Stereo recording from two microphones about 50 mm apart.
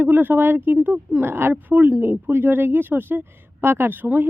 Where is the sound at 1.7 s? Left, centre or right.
Right.